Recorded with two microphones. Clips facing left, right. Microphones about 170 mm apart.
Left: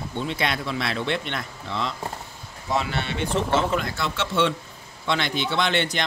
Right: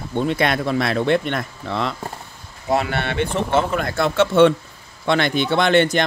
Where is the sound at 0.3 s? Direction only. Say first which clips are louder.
Right 7 dB; 50° right (ahead or behind).